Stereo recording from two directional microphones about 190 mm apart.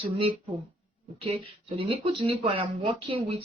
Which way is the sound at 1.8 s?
30° right (ahead or behind).